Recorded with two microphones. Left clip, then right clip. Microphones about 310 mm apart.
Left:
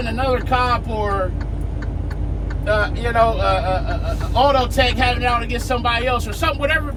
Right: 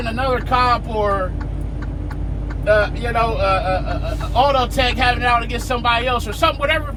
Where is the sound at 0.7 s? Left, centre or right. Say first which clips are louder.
Right 3 dB; right.